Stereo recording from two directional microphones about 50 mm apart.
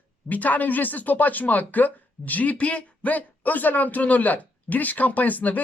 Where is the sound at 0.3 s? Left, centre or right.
Left.